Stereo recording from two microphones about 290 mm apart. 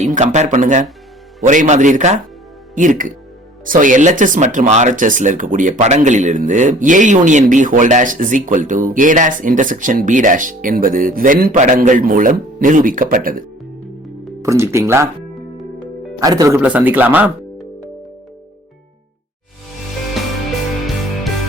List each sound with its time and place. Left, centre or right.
0.0 s speech: right
14.4 s speech: centre
16.2 s speech: centre